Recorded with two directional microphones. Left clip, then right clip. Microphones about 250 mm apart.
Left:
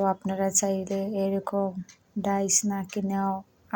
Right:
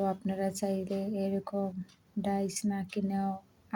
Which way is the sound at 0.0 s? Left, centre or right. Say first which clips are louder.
Left 6 dB; centre.